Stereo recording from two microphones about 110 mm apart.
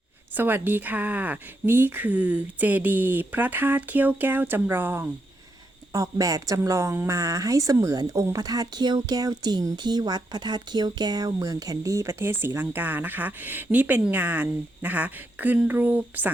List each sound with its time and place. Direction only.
0.3 s a woman's voice: 15° right (ahead or behind)
5.9 s a woman's voice: 30° right (ahead or behind); by 16.3 s 15° right (ahead or behind)